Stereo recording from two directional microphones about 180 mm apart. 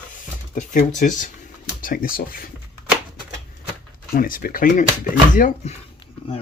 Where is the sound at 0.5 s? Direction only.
45° left (ahead or behind).